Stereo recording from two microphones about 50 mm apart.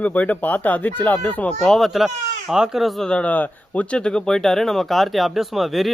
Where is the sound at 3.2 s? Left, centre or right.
Left.